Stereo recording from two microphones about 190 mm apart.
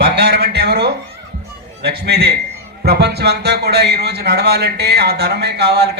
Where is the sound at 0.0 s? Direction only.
60° right (ahead or behind).